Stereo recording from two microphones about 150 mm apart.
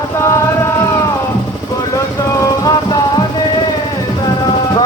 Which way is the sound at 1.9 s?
25° left (ahead or behind).